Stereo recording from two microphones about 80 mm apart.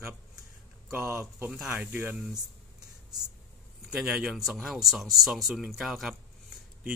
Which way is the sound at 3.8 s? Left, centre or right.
Centre.